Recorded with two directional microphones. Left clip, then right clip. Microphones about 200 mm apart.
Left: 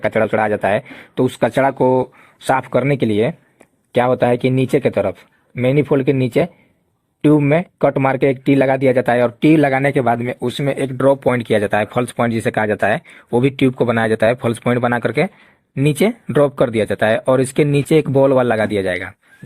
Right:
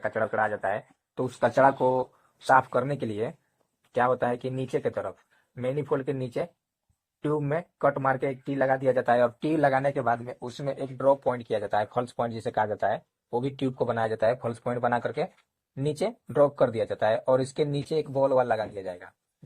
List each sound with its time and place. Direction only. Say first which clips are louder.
0.0 s speech: left 11 dB; 45° left (ahead or behind); by 2.9 s 30° left (ahead or behind)
2.9 s speech: left 14 dB; 50° left (ahead or behind)
7.3 s speech: left 14 dB; 45° left (ahead or behind)
9.0 s speech: left 10 dB; 30° left (ahead or behind)
9.6 s speech: left 9 dB; 40° left (ahead or behind)
11.5 s speech: left 10 dB; 50° left (ahead or behind)
11.9 s speech: left 11 dB; 35° left (ahead or behind)
13.8 s speech: left 9 dB; 55° left (ahead or behind)